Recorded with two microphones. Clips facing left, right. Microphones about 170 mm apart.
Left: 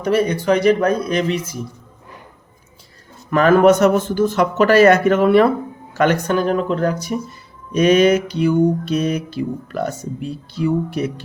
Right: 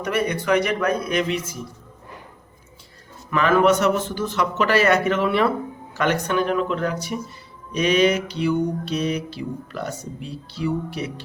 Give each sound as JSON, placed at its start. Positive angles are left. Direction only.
{"t": 0.0, "sound": "speech", "side_deg": 30}
{"t": 3.2, "sound": "speech", "side_deg": 45}